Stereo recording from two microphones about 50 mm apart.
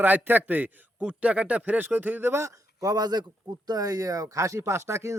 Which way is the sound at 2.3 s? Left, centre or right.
Right.